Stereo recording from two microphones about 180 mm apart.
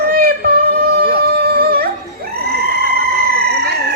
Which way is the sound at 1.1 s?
60° right (ahead or behind).